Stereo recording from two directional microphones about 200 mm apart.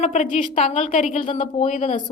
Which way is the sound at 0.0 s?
35° left (ahead or behind).